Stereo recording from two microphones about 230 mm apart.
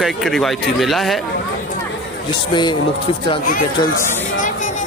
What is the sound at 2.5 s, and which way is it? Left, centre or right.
Speech, centre.